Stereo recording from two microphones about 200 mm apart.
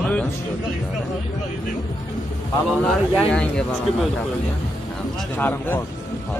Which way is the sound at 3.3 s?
5° left (ahead or behind).